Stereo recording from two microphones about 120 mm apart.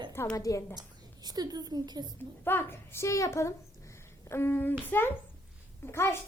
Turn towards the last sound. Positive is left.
turn(degrees=20)  # may be behind; listen again after turning